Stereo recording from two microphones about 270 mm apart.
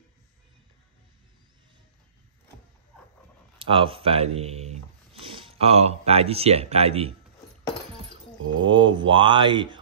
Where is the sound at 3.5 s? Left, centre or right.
Centre.